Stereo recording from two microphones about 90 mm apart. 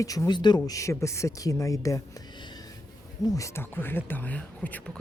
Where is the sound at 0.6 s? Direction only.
35° left (ahead or behind).